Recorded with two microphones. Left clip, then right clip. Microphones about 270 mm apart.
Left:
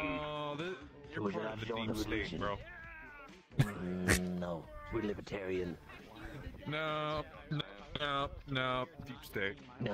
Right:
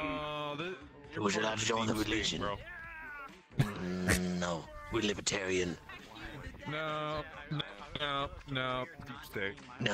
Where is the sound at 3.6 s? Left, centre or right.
Centre.